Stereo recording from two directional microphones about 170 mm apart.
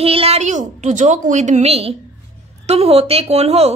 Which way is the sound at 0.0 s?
35° right (ahead or behind).